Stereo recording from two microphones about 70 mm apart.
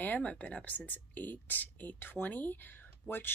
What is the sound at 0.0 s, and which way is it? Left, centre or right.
Speech, left.